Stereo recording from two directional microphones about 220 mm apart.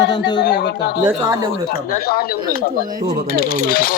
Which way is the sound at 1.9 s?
45° left (ahead or behind).